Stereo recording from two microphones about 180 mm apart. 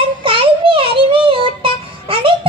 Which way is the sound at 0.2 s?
30° right (ahead or behind).